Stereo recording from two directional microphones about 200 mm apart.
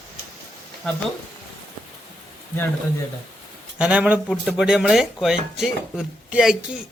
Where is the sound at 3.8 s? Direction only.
5° right (ahead or behind).